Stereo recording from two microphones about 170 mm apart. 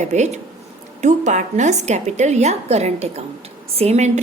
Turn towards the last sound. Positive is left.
turn(degrees=-40)  # may be behind; listen again after turning